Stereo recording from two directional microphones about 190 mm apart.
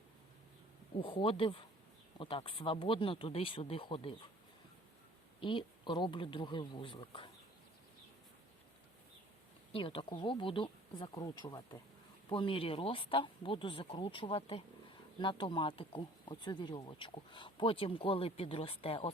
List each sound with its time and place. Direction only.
0.9 s speech: 30° left (ahead or behind)
5.4 s speech: 25° left (ahead or behind)
9.7 s speech: 25° left (ahead or behind)